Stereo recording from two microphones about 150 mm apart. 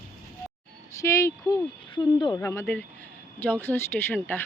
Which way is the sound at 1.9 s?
30° left (ahead or behind).